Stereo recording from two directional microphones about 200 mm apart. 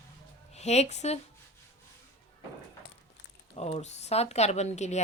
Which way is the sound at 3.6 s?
35° left (ahead or behind).